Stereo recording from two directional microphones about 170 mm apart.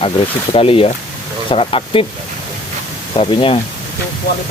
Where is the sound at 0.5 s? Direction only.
35° left (ahead or behind).